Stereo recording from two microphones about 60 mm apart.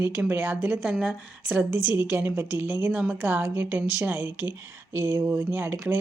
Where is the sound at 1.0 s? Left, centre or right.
Centre.